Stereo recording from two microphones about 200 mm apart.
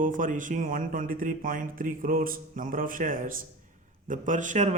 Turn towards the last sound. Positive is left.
turn(degrees=-35)  # may be behind; listen again after turning